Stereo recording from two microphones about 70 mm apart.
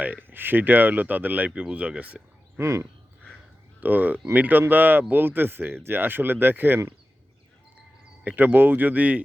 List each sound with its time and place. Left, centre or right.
0.0 s speech: right
2.6 s speech: right
3.8 s speech: right
8.2 s speech: right